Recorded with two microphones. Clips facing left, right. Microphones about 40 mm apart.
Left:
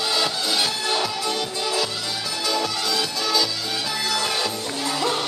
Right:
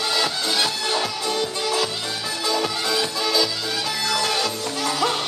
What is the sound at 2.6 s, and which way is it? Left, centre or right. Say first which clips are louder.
Music: right 1 dB; right.